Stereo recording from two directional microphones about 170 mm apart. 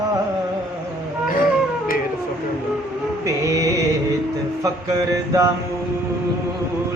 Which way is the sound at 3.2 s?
20° right (ahead or behind).